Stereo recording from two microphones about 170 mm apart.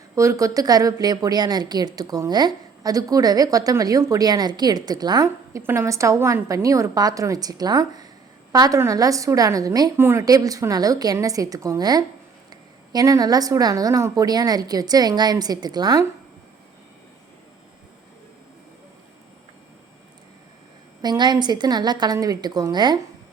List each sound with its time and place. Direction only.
0.2 s a woman's voice: 20° right (ahead or behind)
21.0 s a woman's voice: 25° right (ahead or behind)